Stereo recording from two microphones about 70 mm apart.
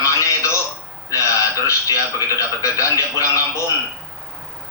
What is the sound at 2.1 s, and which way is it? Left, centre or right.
Television, left.